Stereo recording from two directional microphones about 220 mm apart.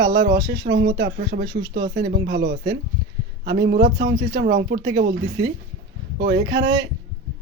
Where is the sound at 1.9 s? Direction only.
55° right (ahead or behind).